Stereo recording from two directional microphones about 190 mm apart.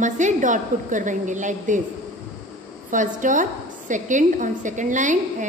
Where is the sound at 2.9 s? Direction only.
45° right (ahead or behind).